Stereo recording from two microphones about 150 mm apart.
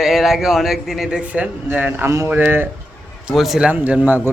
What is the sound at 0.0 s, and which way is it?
Speech, centre (ahead or behind).